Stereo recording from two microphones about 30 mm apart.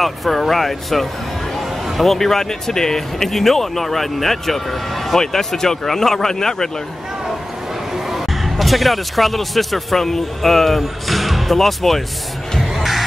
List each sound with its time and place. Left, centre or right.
0.0 s speech: centre
8.1 s speech: centre